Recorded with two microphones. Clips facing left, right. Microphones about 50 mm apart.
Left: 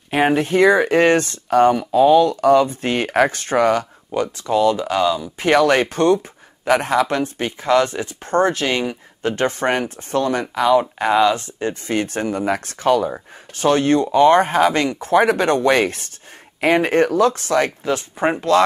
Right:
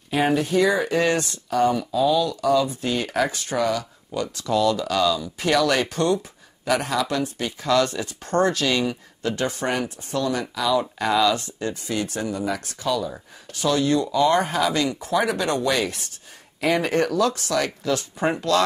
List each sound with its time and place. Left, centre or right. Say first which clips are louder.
0.1 s speech: left 4 dB; left
4.4 s speech: left 3 dB; left